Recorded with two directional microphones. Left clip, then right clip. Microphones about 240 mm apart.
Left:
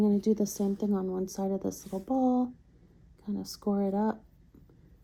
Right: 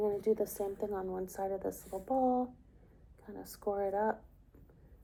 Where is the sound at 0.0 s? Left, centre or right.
Left.